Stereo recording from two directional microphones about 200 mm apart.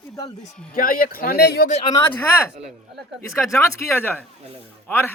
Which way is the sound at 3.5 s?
15° left (ahead or behind).